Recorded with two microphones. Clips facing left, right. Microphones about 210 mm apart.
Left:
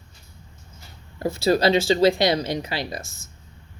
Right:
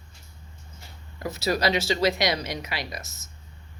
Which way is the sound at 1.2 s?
30° left (ahead or behind).